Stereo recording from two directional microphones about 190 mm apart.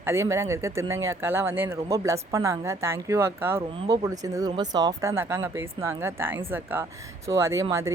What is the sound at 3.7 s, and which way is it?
Speech, 20° right (ahead or behind).